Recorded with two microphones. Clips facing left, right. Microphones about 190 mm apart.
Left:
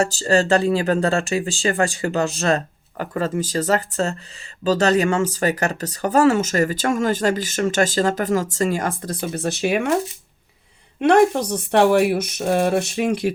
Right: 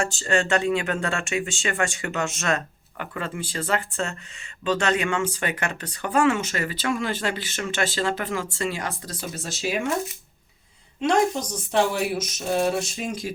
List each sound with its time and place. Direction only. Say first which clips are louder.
0.0 s speech: left 6 dB; 35° left (ahead or behind); by 9.9 s 60° left (ahead or behind)
11.0 s speech: left 7 dB; 60° left (ahead or behind)